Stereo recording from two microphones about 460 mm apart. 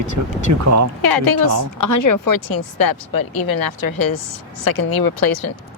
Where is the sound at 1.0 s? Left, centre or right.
Left.